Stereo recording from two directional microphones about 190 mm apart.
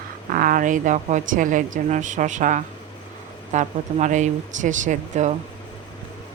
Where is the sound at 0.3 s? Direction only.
45° right (ahead or behind).